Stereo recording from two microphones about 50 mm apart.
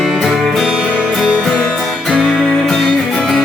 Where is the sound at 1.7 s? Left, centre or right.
Centre.